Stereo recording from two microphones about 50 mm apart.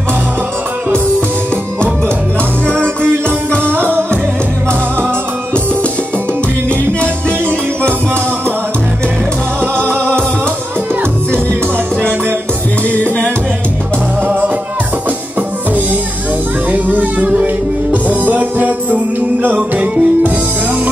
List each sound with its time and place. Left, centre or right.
2.6 s music: centre
3.7 s music: right
9.6 s music: right
12.9 s music: left
16.7 s music: right